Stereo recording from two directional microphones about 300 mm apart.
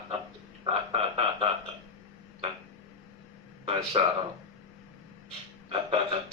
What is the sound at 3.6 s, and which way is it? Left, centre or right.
Speech, centre.